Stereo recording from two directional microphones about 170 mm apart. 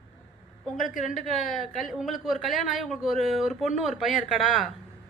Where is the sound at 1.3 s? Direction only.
Centre (ahead or behind).